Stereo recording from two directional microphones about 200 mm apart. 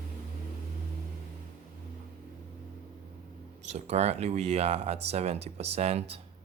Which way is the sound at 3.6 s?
35° right (ahead or behind).